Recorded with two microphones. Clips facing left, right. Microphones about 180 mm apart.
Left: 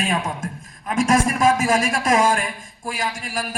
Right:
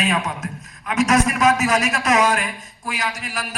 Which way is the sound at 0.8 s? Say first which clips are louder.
Right 1 dB; 50° left (ahead or behind).